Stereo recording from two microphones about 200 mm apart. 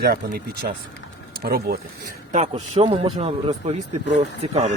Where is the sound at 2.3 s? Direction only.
35° right (ahead or behind).